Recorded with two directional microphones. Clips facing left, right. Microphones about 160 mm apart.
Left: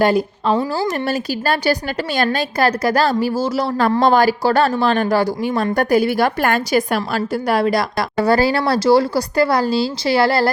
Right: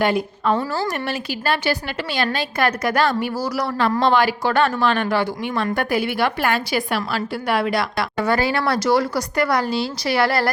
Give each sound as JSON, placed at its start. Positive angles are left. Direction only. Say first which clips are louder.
{"t": 0.0, "sound": "a woman's voice", "louder": "left 4 dB", "side_deg": 35}
{"t": 4.0, "sound": "a woman's voice", "louder": "left 4 dB", "side_deg": 40}